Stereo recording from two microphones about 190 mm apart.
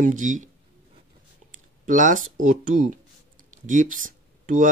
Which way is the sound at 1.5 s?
40° right (ahead or behind).